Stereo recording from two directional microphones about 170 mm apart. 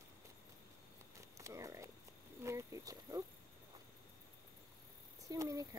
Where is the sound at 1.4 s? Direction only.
20° right (ahead or behind).